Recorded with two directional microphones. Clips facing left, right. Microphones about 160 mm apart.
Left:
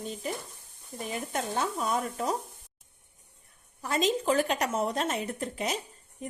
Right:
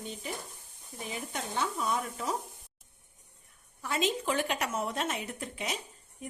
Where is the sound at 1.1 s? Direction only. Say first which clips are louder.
Left 5 dB; 50° left (ahead or behind).